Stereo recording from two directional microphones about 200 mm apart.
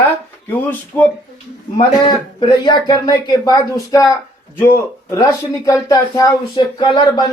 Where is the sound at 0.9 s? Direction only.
10° left (ahead or behind).